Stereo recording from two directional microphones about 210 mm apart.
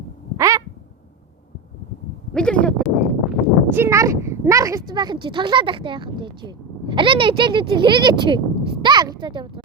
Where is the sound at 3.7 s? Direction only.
10° right (ahead or behind).